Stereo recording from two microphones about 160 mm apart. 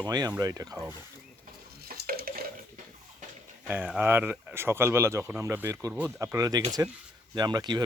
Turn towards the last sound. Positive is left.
turn(degrees=-25)  # may be behind; listen again after turning